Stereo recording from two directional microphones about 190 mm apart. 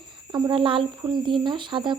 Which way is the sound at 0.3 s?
20° right (ahead or behind).